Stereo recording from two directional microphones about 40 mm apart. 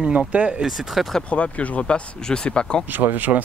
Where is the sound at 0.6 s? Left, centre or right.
Centre.